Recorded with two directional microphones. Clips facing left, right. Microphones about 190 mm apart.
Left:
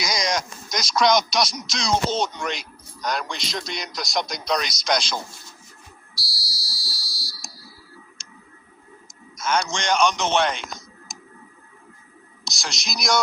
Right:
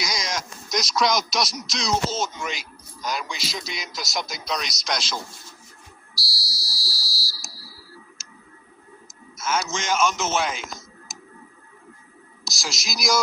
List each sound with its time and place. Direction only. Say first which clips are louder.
0.0 s speech: left 4 dB; centre (ahead or behind)
6.1 s fire alarm: right 2 dB; centre (ahead or behind)
7.5 s a sound: even; 20° left (ahead or behind)
8.2 s tick: left 1 dB; 5° right (ahead or behind)
9.3 s a man's voice: left 2 dB; 5° right (ahead or behind)
12.5 s speech: even; centre (ahead or behind)